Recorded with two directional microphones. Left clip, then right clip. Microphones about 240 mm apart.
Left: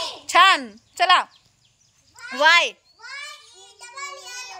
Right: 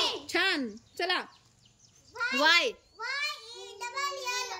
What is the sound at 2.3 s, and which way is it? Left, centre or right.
Speech, centre.